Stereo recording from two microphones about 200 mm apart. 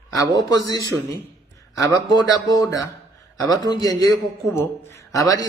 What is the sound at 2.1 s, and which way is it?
A woman's voice, 20° left (ahead or behind).